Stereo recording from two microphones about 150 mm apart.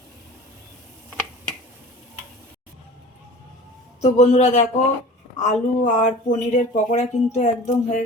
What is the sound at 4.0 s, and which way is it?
Speech, 45° left (ahead or behind).